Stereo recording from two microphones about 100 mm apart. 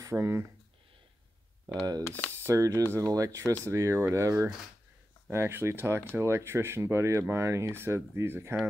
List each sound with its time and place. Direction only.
0.0 s speech: 30° right (ahead or behind)
2.0 s speech: 20° left (ahead or behind)
2.3 s speech: 30° right (ahead or behind)